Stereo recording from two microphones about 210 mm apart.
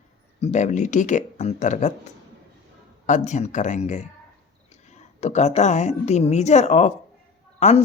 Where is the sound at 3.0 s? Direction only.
35° left (ahead or behind).